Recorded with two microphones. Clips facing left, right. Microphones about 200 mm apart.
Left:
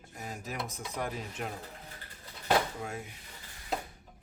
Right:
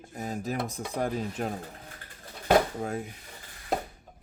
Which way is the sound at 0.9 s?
35° right (ahead or behind).